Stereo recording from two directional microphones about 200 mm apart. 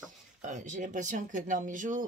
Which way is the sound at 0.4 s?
40° right (ahead or behind).